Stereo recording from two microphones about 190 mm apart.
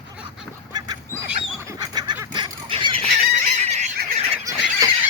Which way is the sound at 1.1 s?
15° right (ahead or behind).